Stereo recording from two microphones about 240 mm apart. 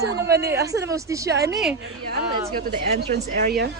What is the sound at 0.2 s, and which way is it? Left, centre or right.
Speech, right.